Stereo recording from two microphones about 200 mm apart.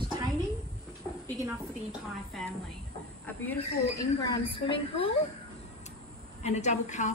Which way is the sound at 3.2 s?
10° left (ahead or behind).